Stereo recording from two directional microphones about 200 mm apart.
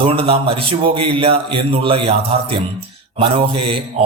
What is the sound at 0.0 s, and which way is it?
A man's voice, 30° right (ahead or behind).